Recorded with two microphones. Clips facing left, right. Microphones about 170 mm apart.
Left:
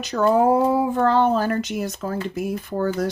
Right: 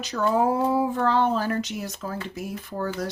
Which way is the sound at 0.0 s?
55° left (ahead or behind).